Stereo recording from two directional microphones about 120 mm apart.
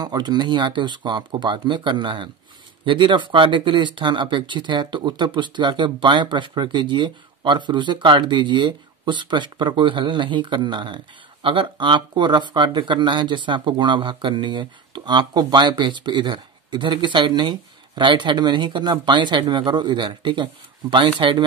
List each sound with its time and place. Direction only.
0.0 s speech: 35° right (ahead or behind)